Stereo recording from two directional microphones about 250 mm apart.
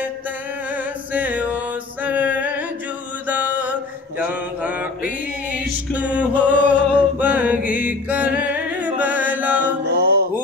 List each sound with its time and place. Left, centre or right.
0.7 s music: centre
3.3 s mantra: centre
4.3 s music: centre
9.8 s music: right